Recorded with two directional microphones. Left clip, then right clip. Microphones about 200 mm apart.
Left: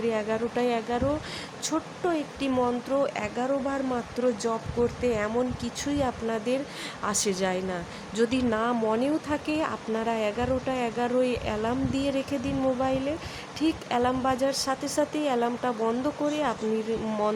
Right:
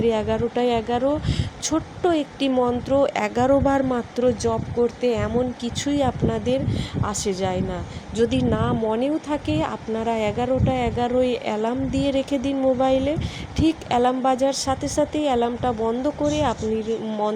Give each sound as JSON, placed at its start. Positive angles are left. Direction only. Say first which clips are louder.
{"t": 0.0, "sound": "a woman's voice", "louder": "right 6 dB", "side_deg": -15}